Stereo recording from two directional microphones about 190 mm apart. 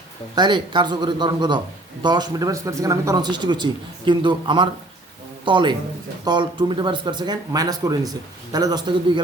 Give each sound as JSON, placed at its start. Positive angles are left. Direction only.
{"t": 0.3, "sound": "a man's voice", "side_deg": -25}